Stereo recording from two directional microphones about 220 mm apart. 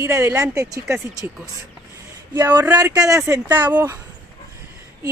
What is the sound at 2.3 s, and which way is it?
Speech, 10° right (ahead or behind).